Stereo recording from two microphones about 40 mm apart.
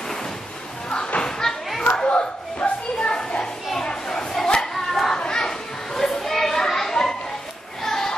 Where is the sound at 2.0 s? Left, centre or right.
Left.